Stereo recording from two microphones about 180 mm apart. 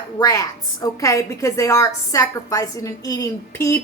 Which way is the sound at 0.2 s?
20° left (ahead or behind).